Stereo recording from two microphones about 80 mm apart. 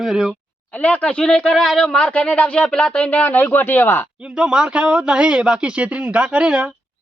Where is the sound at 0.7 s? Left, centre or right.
Centre.